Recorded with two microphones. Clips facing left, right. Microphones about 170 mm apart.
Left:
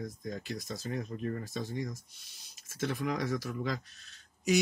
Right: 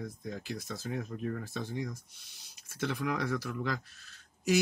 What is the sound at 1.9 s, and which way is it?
Speech, 60° right (ahead or behind).